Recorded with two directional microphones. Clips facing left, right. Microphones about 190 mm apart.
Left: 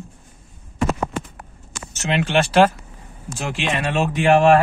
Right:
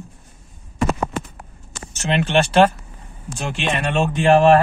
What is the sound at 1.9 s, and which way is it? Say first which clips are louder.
Speech: right 1 dB; centre (ahead or behind).